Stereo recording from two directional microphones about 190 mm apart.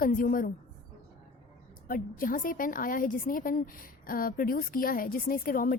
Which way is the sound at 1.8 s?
45° left (ahead or behind).